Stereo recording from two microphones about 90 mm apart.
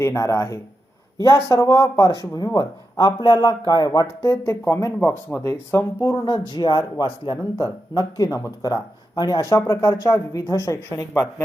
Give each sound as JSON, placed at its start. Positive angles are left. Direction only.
{"t": 0.0, "sound": "speech", "side_deg": 30}
{"t": 4.2, "sound": "speech", "side_deg": 35}
{"t": 6.1, "sound": "speech", "side_deg": 55}